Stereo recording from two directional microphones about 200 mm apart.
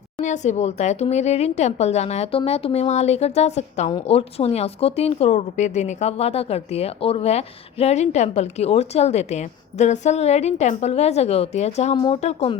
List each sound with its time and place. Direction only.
0.2 s speech: 35° left (ahead or behind)